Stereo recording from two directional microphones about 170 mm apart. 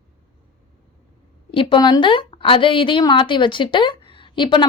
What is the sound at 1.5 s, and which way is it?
A woman's voice, 30° left (ahead or behind).